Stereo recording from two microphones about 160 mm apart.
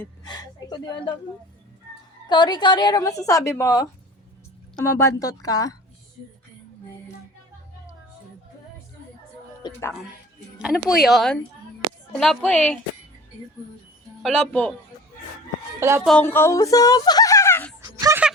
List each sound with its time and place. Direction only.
0.3 s a woman's voice: 25° left (ahead or behind)
2.3 s a woman's voice: 25° left (ahead or behind)
4.9 s a woman's voice: 20° left (ahead or behind)
9.6 s speech: 25° left (ahead or behind)
10.6 s speech: 5° right (ahead or behind)
14.2 s speech: centre (ahead or behind)
15.8 s music: 15° right (ahead or behind)
16.2 s speech: 15° left (ahead or behind)
17.8 s a sound: 15° right (ahead or behind)